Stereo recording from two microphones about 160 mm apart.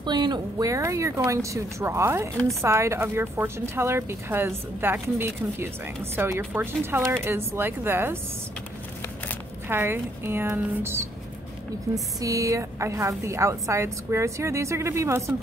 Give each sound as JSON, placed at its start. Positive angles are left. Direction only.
{"t": 0.0, "sound": "a woman's voice", "side_deg": -30}
{"t": 9.7, "sound": "a woman's voice", "side_deg": -15}